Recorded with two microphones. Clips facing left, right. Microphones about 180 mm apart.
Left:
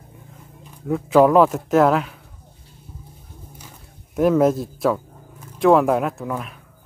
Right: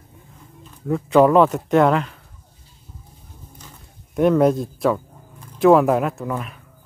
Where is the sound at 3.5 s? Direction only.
5° left (ahead or behind).